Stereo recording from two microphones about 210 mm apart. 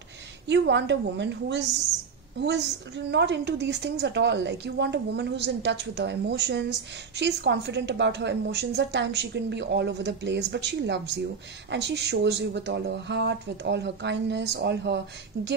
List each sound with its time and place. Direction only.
0.5 s a woman's voice: 55° right (ahead or behind)